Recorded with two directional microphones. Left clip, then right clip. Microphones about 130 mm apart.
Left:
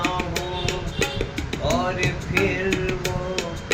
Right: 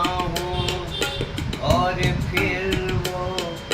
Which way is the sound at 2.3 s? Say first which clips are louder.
Left 1 dB; 25° left (ahead or behind).